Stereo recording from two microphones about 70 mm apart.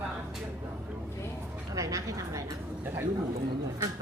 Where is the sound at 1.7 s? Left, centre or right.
Right.